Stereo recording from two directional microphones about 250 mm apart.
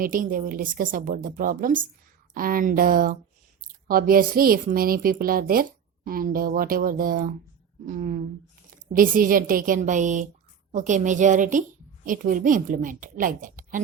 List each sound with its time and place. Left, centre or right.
0.0 s a woman's voice: right